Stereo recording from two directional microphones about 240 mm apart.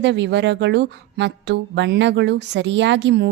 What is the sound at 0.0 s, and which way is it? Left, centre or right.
Speech, right.